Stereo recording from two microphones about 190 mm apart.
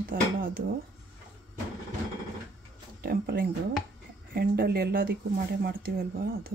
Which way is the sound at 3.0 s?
50° right (ahead or behind).